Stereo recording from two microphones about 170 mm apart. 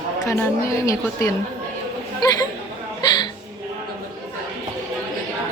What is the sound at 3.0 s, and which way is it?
Hiccup, 25° left (ahead or behind).